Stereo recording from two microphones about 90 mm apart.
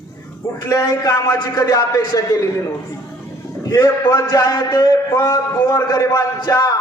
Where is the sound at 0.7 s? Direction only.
40° left (ahead or behind).